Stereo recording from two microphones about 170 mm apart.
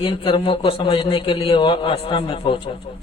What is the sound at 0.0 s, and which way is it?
A man's voice, 30° left (ahead or behind).